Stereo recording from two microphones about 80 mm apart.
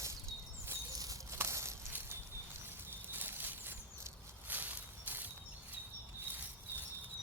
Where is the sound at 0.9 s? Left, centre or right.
Right.